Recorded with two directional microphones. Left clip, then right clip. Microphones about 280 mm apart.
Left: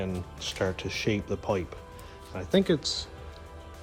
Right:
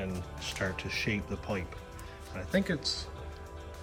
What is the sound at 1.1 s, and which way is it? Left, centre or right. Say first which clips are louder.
Speech: left 6 dB; centre.